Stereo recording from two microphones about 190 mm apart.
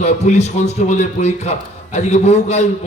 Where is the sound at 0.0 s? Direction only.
35° left (ahead or behind).